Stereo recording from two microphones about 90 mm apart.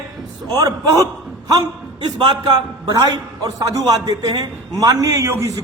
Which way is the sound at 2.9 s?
40° right (ahead or behind).